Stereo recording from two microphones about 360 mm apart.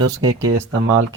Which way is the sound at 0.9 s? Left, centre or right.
Right.